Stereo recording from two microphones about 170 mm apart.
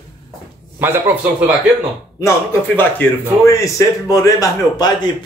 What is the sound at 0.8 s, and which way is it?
Speech, 10° right (ahead or behind).